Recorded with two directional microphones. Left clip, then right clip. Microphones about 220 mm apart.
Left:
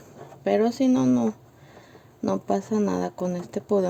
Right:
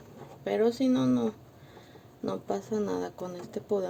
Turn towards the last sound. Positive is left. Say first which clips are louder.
# left 7 dB
turn(degrees=45)  # may be behind; listen again after turning